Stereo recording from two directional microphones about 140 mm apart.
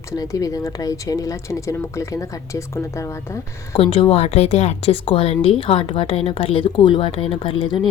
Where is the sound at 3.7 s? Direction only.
40° left (ahead or behind).